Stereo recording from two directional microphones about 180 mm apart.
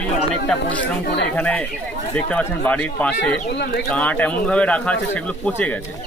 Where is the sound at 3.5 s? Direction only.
70° left (ahead or behind).